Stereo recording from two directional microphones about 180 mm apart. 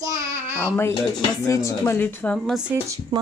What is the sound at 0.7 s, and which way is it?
Speech, 10° left (ahead or behind).